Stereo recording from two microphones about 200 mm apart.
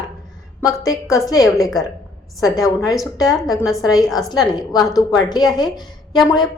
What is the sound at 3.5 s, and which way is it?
Speech, centre (ahead or behind).